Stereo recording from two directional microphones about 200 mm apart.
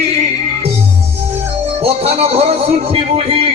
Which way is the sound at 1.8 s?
30° right (ahead or behind).